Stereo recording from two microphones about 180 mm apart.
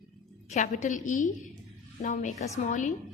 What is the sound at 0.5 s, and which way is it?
A woman's voice, 45° left (ahead or behind).